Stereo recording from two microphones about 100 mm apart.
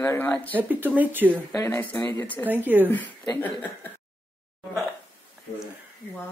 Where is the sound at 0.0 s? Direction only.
20° left (ahead or behind).